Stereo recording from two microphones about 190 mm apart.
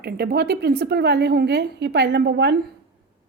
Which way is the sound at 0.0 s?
55° right (ahead or behind).